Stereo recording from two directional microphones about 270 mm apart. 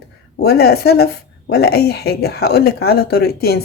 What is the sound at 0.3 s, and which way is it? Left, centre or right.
Speech, left.